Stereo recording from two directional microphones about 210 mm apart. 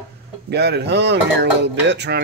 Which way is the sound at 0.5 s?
50° right (ahead or behind).